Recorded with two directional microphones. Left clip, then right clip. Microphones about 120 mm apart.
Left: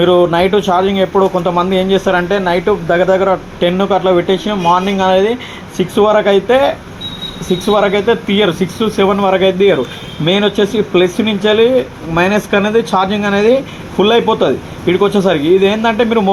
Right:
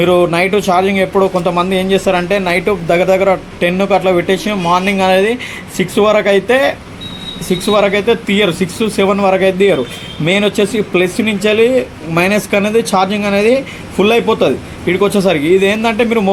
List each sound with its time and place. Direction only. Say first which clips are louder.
0.0 s speech: left 1 dB; 20° right (ahead or behind)
2.4 s speech: left 1 dB; 35° right (ahead or behind)